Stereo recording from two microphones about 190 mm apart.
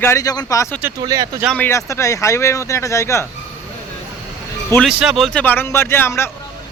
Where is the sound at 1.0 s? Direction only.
20° right (ahead or behind).